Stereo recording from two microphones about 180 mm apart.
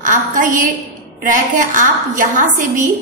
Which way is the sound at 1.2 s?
45° right (ahead or behind).